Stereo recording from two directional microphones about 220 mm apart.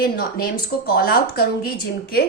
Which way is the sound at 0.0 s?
40° left (ahead or behind).